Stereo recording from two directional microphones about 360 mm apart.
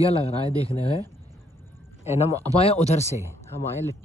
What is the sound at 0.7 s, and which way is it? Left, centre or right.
Speech, centre.